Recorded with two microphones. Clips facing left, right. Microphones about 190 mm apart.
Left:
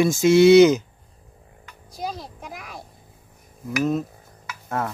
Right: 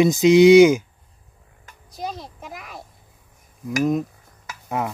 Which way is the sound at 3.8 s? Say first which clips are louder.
Right 2 dB; 15° right (ahead or behind).